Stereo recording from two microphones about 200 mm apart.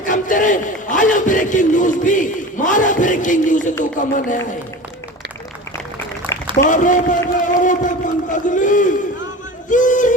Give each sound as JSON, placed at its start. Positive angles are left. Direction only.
{"t": 0.0, "sound": "a man's voice", "side_deg": 40}
{"t": 6.7, "sound": "a man's voice", "side_deg": 40}
{"t": 9.6, "sound": "a sound", "side_deg": 40}